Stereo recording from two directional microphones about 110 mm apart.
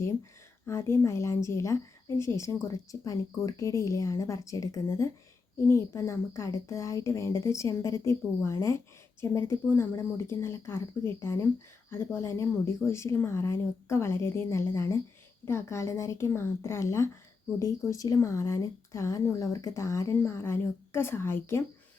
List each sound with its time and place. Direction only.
0.7 s a woman's voice: 25° left (ahead or behind)